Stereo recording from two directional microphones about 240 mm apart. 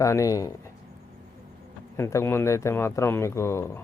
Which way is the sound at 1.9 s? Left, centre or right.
Centre.